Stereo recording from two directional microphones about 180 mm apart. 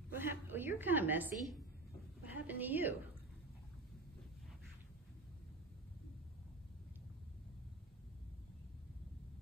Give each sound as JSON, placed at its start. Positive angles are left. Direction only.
{"t": 0.1, "sound": "a woman's voice", "side_deg": -10}